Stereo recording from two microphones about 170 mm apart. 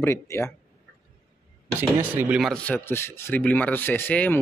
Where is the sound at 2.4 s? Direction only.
5° left (ahead or behind).